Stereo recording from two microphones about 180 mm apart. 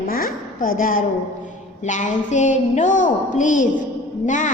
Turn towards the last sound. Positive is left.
turn(degrees=45)  # may be behind; listen again after turning